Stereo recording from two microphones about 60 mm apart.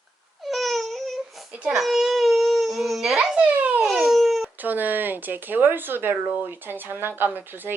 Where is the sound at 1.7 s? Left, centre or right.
Centre.